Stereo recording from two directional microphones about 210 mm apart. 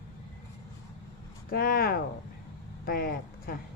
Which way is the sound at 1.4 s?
45° left (ahead or behind).